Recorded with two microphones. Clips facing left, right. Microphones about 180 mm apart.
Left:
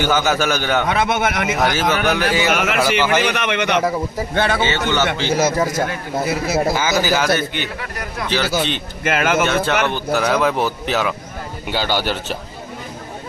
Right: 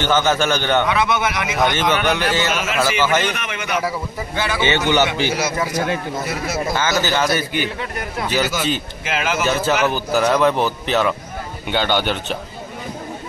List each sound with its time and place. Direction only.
0.0 s a man's voice: 10° left (ahead or behind)
0.8 s speech: 50° left (ahead or behind)
1.6 s a man's voice: 5° left (ahead or behind)
2.5 s speech: 60° left (ahead or behind)
2.8 s a man's voice: 10° left (ahead or behind)
3.3 s speech: 70° left (ahead or behind)
3.8 s speech: 50° left (ahead or behind)
4.6 s speech: 15° right (ahead or behind)
5.3 s speech: 45° left (ahead or behind)
6.7 s a man's voice: 10° left (ahead or behind)
7.3 s speech: 10° right (ahead or behind)
9.0 s speech: 55° left (ahead or behind)
9.7 s a man's voice: 5° right (ahead or behind)